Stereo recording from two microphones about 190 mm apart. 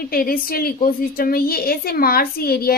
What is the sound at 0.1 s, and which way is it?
A child's voice, 50° left (ahead or behind).